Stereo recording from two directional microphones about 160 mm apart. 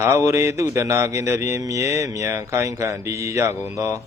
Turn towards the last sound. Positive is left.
turn(degrees=-20)  # may be behind; listen again after turning